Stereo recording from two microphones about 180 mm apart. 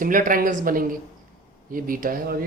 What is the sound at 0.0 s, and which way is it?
A man's voice, 50° right (ahead or behind).